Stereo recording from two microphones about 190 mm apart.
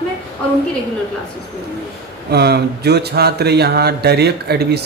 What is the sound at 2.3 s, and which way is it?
Speech, 60° right (ahead or behind).